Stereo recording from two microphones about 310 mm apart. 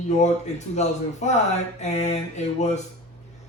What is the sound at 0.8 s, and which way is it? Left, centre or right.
Speech, left.